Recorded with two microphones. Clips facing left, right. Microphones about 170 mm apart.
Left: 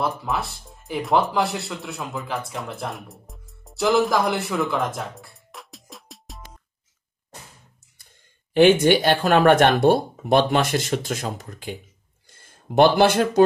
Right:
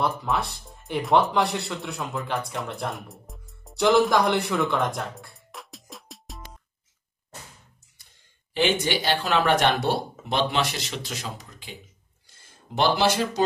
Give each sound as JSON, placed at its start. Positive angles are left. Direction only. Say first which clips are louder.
{"t": 0.0, "sound": "speech", "louder": "even", "side_deg": 0}
{"t": 8.5, "sound": "speech", "louder": "left 9 dB", "side_deg": 50}
{"t": 12.3, "sound": "a sound", "louder": "left 5 dB", "side_deg": 55}